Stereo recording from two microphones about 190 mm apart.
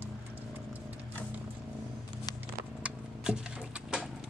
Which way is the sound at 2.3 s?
20° left (ahead or behind).